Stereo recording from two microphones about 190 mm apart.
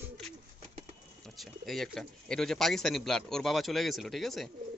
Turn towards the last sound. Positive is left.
turn(degrees=0)  # may be behind; listen again after turning